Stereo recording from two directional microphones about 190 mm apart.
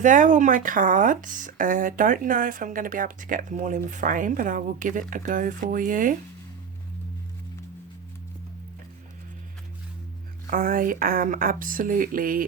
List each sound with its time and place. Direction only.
0.0 s speech: 40° right (ahead or behind)
10.4 s speech: 45° right (ahead or behind)